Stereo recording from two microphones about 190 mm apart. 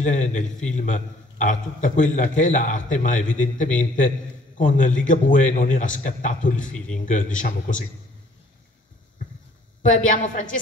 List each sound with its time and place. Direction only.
0.0 s a man's voice: 40° left (ahead or behind)
9.8 s a man's voice: 40° left (ahead or behind)